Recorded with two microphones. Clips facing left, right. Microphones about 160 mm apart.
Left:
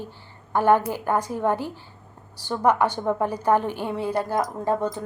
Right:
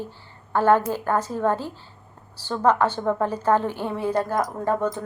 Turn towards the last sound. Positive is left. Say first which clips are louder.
# right 1 dB
turn(degrees=15)  # may be behind; listen again after turning